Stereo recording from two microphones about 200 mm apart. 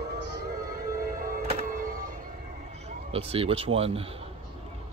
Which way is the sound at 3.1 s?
30° right (ahead or behind).